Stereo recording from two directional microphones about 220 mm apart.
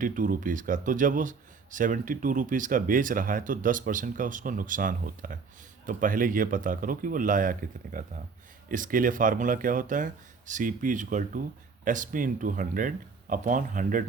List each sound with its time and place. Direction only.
0.0 s speech: 40° right (ahead or behind)